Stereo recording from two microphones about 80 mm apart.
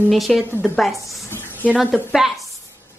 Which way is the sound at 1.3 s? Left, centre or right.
Left.